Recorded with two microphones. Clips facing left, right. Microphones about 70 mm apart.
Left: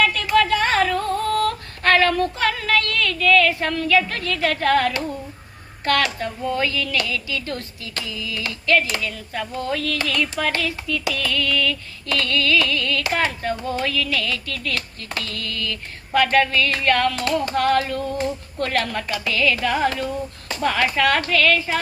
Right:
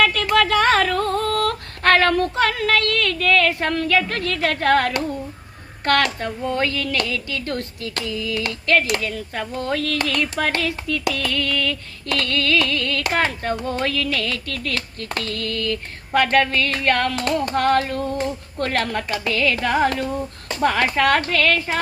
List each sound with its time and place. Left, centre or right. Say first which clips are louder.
0.0 s a sound: right 1 dB; right
1.4 s female singing: even; right
5.8 s speech: right 2 dB; right